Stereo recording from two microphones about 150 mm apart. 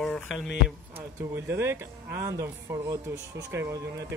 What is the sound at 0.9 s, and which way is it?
Speech, 15° right (ahead or behind).